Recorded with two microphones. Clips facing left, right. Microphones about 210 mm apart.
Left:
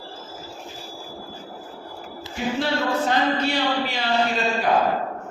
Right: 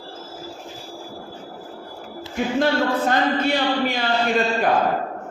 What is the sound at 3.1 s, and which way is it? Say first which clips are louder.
Speech: right 2 dB; 50° right (ahead or behind).